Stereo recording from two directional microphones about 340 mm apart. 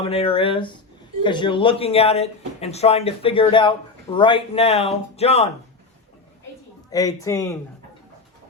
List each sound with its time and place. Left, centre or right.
0.0 s speech: centre
6.9 s speech: centre